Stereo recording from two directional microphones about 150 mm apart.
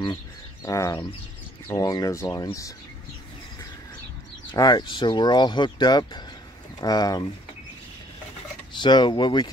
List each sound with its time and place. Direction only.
0.7 s speech: 20° left (ahead or behind)
4.5 s speech: 30° left (ahead or behind)
8.7 s speech: 30° left (ahead or behind)